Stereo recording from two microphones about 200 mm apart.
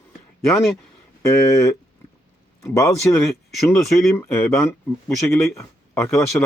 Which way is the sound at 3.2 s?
Centre (ahead or behind).